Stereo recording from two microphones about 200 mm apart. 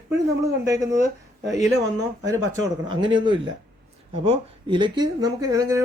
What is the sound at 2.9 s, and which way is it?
Speech, 25° right (ahead or behind).